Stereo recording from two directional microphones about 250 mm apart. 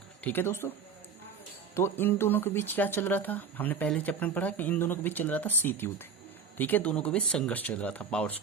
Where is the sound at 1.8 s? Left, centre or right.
Centre.